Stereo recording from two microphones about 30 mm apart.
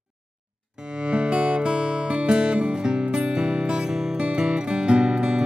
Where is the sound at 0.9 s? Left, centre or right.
Right.